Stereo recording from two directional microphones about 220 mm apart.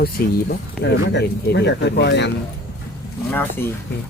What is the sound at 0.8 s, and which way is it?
Speech, 50° left (ahead or behind).